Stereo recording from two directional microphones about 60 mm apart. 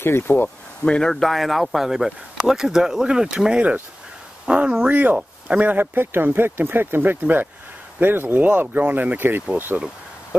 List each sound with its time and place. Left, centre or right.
0.0 s speech: left
0.8 s speech: centre; by 9.4 s right